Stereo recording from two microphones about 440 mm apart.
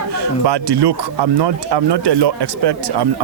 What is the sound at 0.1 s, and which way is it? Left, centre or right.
Speech, right.